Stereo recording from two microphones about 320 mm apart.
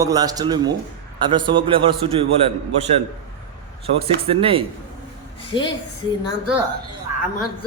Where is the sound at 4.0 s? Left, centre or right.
Centre.